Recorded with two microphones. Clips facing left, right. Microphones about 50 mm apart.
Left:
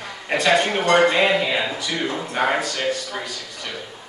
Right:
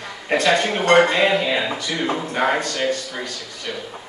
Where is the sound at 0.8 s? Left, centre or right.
Right.